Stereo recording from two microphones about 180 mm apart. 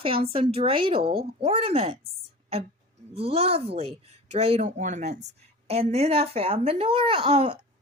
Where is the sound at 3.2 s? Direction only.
35° right (ahead or behind).